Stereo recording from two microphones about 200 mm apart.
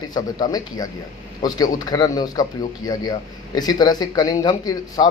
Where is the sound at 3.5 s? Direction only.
20° left (ahead or behind).